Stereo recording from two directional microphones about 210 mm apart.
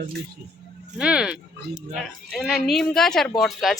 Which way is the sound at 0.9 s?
5° right (ahead or behind).